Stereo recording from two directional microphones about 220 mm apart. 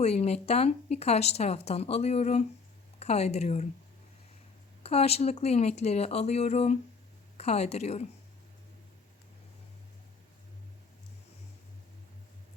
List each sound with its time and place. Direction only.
0.0 s speech: 30° left (ahead or behind)
4.8 s speech: 30° left (ahead or behind)